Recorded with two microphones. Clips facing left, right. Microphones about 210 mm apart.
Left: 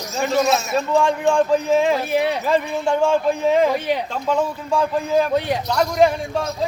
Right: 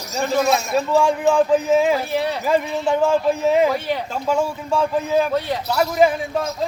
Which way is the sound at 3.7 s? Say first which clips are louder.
Left 2 dB; 15° left (ahead or behind).